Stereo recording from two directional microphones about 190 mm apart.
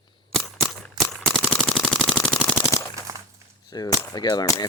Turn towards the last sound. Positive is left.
turn(degrees=20)  # may be behind; listen again after turning